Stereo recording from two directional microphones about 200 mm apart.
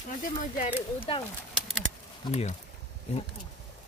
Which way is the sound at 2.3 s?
30° left (ahead or behind).